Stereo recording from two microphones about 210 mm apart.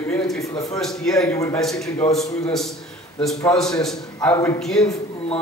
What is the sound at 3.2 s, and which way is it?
A man's voice, centre (ahead or behind).